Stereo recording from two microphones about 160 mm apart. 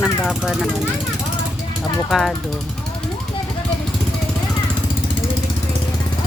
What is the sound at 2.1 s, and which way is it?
Speech, centre (ahead or behind).